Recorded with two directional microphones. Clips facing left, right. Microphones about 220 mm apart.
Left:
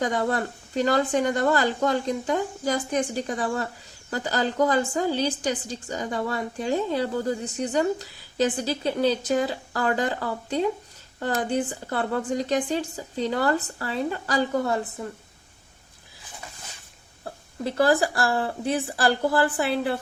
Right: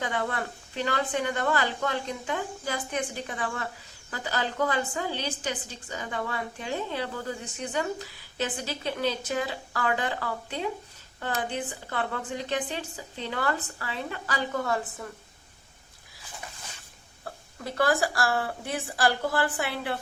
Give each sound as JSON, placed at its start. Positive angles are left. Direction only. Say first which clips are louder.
{"t": 0.0, "sound": "a woman's voice", "louder": "left 6 dB", "side_deg": 40}
{"t": 17.2, "sound": "speech", "louder": "left 7 dB", "side_deg": 30}
{"t": 19.5, "sound": "speech", "louder": "left 6 dB", "side_deg": 35}